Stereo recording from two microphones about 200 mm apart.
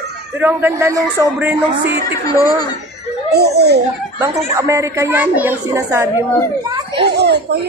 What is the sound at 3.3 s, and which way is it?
Speech, 55° right (ahead or behind).